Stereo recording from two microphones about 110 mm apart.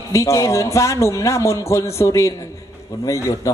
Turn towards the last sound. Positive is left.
turn(degrees=30)  # may be behind; listen again after turning